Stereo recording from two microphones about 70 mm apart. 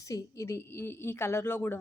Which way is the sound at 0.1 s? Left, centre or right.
Left.